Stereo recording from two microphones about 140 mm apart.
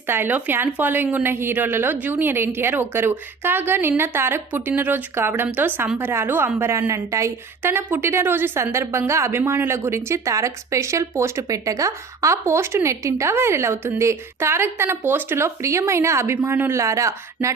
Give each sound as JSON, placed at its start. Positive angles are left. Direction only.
{"t": 0.1, "sound": "a woman's voice", "side_deg": -15}